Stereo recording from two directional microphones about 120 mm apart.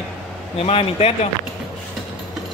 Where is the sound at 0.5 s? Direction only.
55° left (ahead or behind).